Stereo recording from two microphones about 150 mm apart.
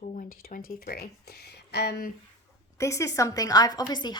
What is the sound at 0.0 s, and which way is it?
Speech, 65° left (ahead or behind).